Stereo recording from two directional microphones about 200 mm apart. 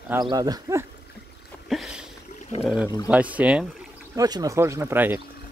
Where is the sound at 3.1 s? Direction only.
5° right (ahead or behind).